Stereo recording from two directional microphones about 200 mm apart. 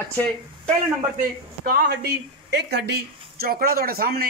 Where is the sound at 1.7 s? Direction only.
55° right (ahead or behind).